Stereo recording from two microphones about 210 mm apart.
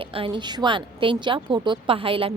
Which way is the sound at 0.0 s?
25° right (ahead or behind).